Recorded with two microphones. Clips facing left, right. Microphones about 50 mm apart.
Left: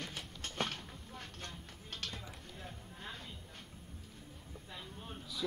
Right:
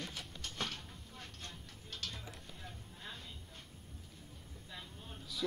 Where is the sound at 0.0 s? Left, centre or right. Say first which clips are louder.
Left 1 dB; left.